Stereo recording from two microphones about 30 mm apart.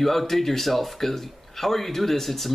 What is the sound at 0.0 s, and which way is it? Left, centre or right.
Speech, centre.